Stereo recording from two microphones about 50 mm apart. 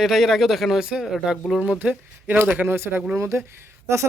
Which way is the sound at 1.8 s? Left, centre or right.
Right.